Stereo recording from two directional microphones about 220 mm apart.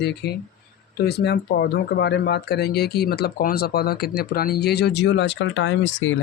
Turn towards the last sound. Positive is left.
turn(degrees=60)  # may be behind; listen again after turning